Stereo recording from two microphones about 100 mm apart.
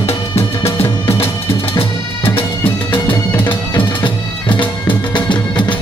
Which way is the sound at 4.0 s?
55° left (ahead or behind).